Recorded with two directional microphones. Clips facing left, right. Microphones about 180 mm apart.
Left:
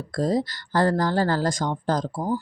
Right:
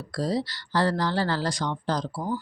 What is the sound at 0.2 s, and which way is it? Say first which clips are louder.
Speech: left 4 dB; 50° left (ahead or behind).